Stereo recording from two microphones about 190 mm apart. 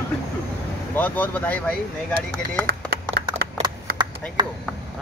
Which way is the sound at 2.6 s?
50° right (ahead or behind).